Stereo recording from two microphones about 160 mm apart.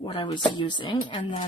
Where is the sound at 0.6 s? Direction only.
30° left (ahead or behind).